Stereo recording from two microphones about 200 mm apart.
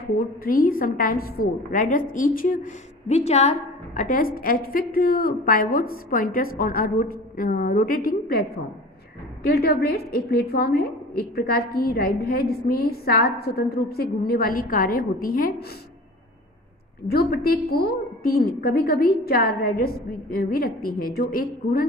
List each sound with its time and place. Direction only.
0.0 s a woman's voice: 45° left (ahead or behind)
17.1 s a woman's voice: 50° left (ahead or behind)